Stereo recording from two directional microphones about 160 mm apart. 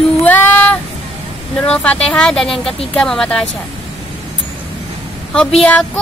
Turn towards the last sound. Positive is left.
turn(degrees=5)  # may be behind; listen again after turning